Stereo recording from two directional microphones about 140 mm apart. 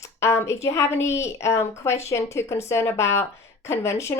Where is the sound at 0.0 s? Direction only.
20° left (ahead or behind).